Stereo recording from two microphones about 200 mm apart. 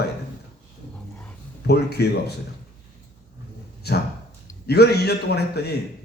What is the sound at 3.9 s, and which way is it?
A man's voice, 55° left (ahead or behind).